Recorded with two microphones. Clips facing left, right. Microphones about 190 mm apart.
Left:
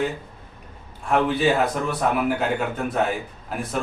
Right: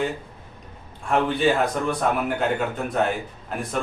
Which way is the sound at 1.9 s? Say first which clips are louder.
Left 1 dB; 5° left (ahead or behind).